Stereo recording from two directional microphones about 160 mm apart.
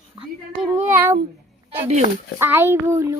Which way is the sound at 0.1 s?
30° right (ahead or behind).